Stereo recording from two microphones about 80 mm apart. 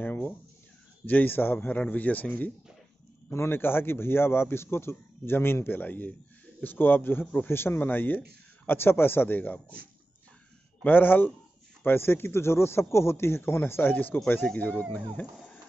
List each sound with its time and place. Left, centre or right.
0.0 s a sound: left
1.0 s a man's voice: left
10.8 s a man's voice: left